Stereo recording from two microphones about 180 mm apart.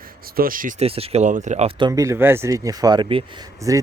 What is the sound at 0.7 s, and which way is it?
Speech, 35° right (ahead or behind).